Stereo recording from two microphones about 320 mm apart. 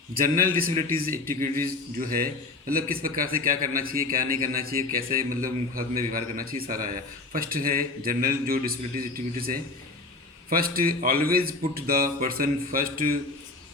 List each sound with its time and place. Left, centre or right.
0.1 s speech: right